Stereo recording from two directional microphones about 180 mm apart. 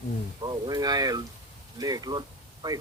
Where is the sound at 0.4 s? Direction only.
25° right (ahead or behind).